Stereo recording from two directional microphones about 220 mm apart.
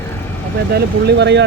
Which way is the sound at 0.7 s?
45° right (ahead or behind).